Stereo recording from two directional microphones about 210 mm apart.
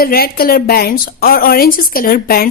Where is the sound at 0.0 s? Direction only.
45° left (ahead or behind).